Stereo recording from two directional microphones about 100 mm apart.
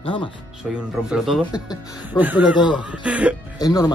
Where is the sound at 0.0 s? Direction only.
60° left (ahead or behind).